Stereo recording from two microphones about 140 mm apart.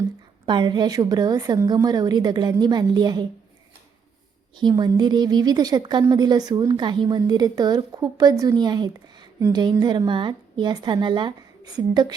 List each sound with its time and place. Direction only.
0.4 s a woman's voice: 35° right (ahead or behind)
4.5 s a woman's voice: 30° right (ahead or behind)